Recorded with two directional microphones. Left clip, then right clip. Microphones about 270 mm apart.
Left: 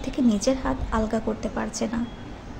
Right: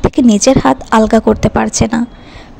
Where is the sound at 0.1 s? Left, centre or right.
Right.